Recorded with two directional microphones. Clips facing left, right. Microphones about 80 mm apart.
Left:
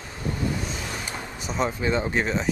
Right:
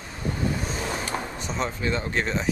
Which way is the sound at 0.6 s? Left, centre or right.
Right.